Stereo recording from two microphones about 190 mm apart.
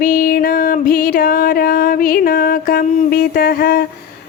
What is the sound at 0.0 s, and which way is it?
Music, 50° left (ahead or behind).